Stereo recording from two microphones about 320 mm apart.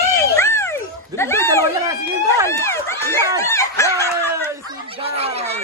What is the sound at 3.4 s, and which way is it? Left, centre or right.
Dog, centre.